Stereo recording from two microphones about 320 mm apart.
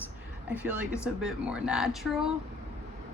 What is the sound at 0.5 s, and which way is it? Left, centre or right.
A woman's voice, centre.